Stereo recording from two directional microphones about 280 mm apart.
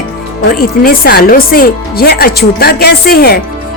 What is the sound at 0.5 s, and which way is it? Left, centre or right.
Speech, left.